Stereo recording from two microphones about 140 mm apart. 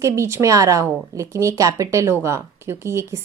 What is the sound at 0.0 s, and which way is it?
A woman's voice, 20° right (ahead or behind).